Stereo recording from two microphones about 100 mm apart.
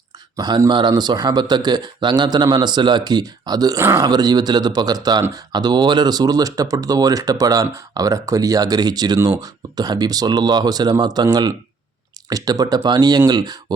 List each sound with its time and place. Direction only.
0.3 s speech: 45° right (ahead or behind)